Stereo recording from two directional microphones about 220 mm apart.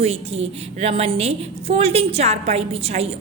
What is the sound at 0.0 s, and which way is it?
A woman's voice, 25° right (ahead or behind).